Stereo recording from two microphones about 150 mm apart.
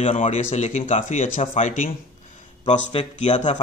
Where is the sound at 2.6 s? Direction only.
45° left (ahead or behind).